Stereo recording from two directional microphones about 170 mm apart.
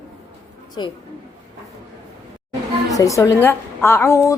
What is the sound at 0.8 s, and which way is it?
Female singing, 30° left (ahead or behind).